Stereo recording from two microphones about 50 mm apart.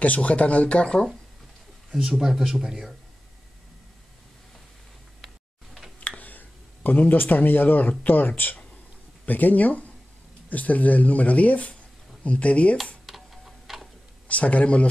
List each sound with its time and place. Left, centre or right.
0.0 s speech: left
0.8 s speech: centre
5.9 s a sound: left
8.0 s speech: left
13.0 s tick-tock: centre
14.2 s speech: left